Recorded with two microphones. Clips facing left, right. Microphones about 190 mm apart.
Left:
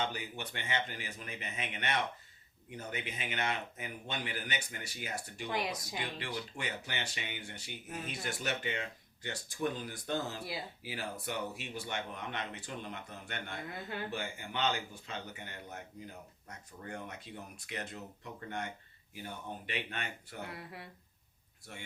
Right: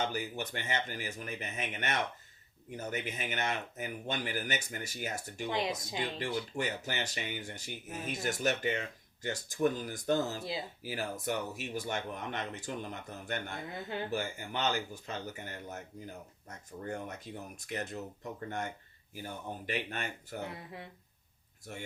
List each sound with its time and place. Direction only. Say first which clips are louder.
0.0 s speech: right 3 dB; 40° right (ahead or behind)
5.5 s speech: right 3 dB; 25° right (ahead or behind)
6.6 s speech: right 5 dB; 40° right (ahead or behind)
13.7 s speech: right 3 dB; 25° right (ahead or behind)
14.1 s speech: right 4 dB; 40° right (ahead or behind)
20.4 s speech: even; 20° right (ahead or behind)